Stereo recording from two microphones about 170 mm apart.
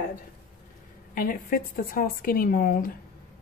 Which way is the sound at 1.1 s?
60° left (ahead or behind).